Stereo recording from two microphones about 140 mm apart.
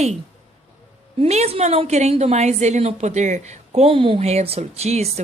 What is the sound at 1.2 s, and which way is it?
A woman's voice, 50° right (ahead or behind).